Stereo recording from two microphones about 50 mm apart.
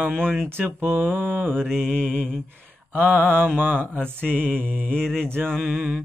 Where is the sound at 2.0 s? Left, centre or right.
Right.